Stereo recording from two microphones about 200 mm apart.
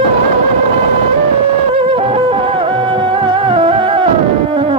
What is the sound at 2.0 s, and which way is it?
Music, 25° right (ahead or behind).